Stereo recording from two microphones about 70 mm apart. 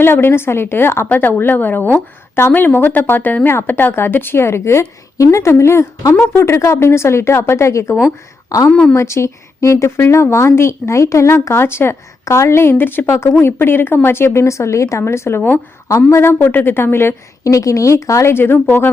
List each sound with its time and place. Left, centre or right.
0.0 s speech: left
6.0 s speech: left
6.3 s speech: left
8.4 s a woman's voice: left
8.7 s speech: centre
9.0 s speech: left
12.2 s speech: left
15.4 s speech: left
15.9 s speech: left
16.4 s speech: left
17.4 s speech: left